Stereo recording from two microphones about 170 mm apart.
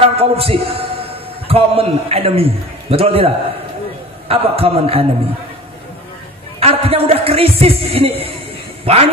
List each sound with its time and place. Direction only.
0.0 s a sound: 35° right (ahead or behind)
1.5 s a man's voice: 35° right (ahead or behind)
4.3 s a man's voice: 35° right (ahead or behind)
6.6 s speech: 35° right (ahead or behind)